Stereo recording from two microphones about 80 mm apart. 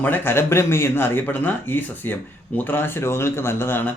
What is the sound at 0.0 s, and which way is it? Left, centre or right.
Speech, left.